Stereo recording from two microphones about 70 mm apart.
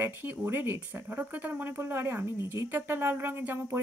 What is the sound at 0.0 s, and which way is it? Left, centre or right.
Speech, right.